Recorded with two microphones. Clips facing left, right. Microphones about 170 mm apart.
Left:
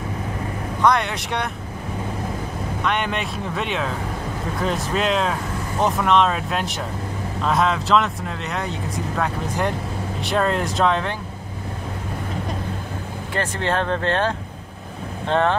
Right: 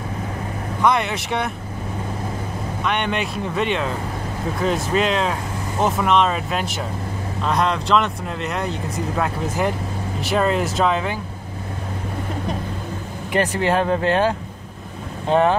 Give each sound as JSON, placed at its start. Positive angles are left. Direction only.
{"t": 0.8, "sound": "speech", "side_deg": 0}
{"t": 2.8, "sound": "speech", "side_deg": 0}
{"t": 13.3, "sound": "speech", "side_deg": -15}